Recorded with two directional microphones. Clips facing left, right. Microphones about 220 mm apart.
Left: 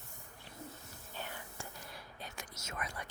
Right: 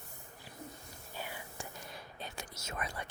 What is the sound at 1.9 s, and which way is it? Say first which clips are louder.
Whispering: right 3 dB; 25° right (ahead or behind).